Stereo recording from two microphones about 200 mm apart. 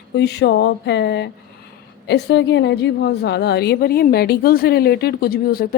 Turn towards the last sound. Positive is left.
turn(degrees=50)  # may be behind; listen again after turning